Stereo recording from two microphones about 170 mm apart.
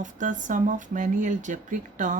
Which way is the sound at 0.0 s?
50° right (ahead or behind).